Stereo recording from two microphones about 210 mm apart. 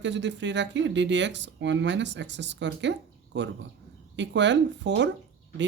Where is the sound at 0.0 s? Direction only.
60° right (ahead or behind).